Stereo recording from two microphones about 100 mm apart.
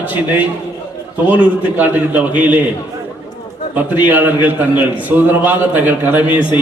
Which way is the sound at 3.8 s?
20° right (ahead or behind).